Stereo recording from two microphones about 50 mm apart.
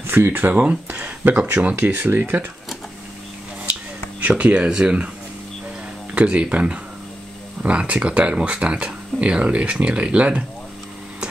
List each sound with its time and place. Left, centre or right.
0.0 s speech: right
4.2 s speech: right
6.1 s speech: right